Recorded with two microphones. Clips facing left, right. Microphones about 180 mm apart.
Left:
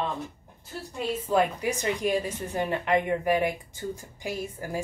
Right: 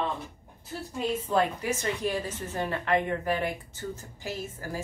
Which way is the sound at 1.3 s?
15° left (ahead or behind).